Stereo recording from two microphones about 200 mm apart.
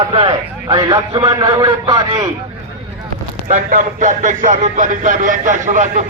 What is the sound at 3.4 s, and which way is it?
A man's voice, 40° right (ahead or behind).